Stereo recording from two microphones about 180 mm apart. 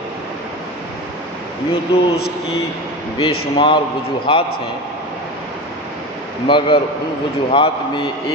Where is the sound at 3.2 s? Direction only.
30° left (ahead or behind).